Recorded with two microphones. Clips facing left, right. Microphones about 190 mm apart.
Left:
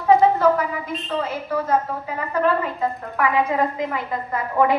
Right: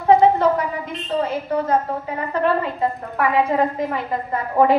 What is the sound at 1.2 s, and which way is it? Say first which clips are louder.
A woman's voice: right 3 dB; 30° right (ahead or behind).